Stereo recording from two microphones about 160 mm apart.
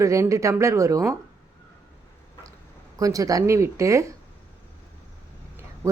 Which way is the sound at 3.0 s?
20° right (ahead or behind).